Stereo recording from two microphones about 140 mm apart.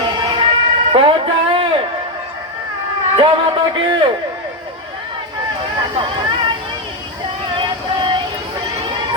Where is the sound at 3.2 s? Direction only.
35° right (ahead or behind).